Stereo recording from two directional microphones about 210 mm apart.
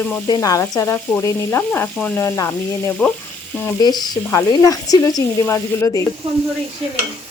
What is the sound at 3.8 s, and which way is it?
Frying, 20° left (ahead or behind).